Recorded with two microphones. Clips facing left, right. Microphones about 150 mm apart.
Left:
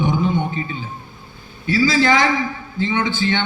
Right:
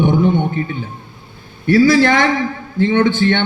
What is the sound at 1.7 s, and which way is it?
A man's voice, 60° right (ahead or behind).